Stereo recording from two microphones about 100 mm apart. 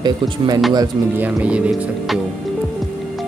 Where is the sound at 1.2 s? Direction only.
15° right (ahead or behind).